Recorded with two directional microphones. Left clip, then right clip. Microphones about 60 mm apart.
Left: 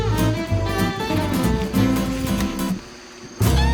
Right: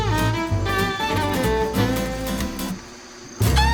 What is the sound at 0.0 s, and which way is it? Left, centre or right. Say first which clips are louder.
Music: right 1 dB; centre.